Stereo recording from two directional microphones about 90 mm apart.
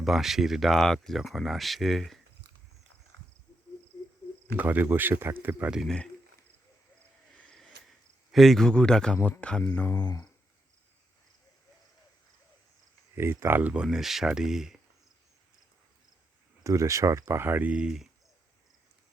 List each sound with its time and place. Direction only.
0.0 s speech: 5° right (ahead or behind)
4.5 s speech: 20° right (ahead or behind)
7.3 s a sound: 15° left (ahead or behind)
7.6 s cricket: centre (ahead or behind)
9.4 s mantra: 10° left (ahead or behind)
10.0 s speech: 45° left (ahead or behind)
13.1 s speech: 30° right (ahead or behind)
13.8 s speech: 5° right (ahead or behind)
16.6 s speech: 35° right (ahead or behind); by 18.1 s 5° right (ahead or behind)